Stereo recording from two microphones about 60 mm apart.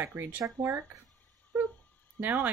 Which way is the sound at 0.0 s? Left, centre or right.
Right.